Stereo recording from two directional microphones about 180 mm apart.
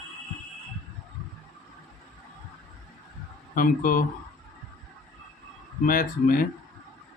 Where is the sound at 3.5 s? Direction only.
50° left (ahead or behind).